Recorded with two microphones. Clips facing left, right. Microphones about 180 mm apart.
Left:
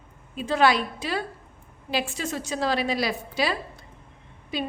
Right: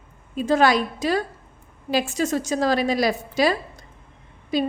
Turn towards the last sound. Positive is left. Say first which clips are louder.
# right 7 dB
turn(degrees=-40)  # may be behind; listen again after turning